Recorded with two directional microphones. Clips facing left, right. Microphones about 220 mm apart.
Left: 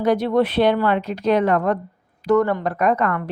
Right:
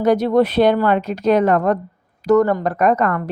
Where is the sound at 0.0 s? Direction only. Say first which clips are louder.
Right 3 dB; 45° right (ahead or behind).